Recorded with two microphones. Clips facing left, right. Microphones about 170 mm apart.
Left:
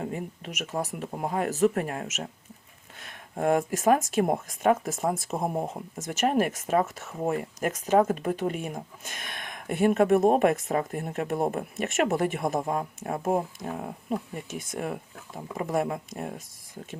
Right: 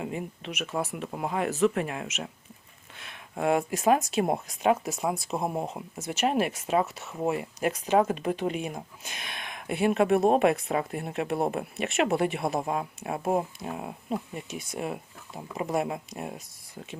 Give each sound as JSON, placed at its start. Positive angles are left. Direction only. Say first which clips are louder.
{"t": 0.4, "sound": "speech", "louder": "right 1 dB", "side_deg": 40}